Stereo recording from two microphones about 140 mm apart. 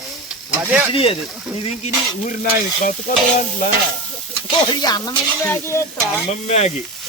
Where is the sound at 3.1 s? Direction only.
80° left.